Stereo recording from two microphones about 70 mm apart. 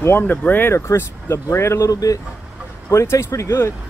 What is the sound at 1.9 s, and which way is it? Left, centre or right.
Speech, left.